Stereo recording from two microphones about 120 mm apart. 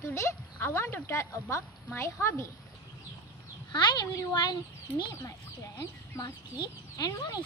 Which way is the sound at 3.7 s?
35° left (ahead or behind).